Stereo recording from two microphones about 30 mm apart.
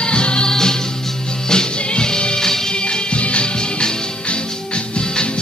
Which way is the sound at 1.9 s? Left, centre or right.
Left.